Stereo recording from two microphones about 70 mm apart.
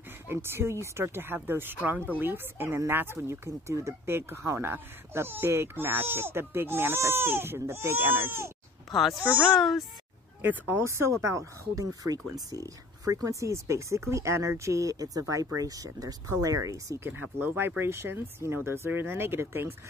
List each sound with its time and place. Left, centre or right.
0.3 s speech: right
8.9 s a child's voice: centre
10.7 s speech: right
17.2 s speech: right